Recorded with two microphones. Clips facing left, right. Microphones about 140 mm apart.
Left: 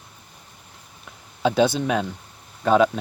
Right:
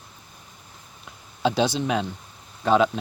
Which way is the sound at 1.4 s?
55° left (ahead or behind).